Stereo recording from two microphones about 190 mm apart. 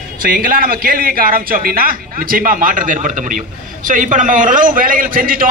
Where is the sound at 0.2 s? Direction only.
50° right (ahead or behind).